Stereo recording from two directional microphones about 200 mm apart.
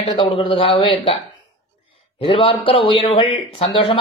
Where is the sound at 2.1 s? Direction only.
25° left (ahead or behind).